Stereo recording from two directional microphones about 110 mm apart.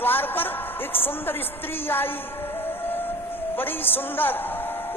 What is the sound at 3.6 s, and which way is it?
A man's voice, 20° left (ahead or behind).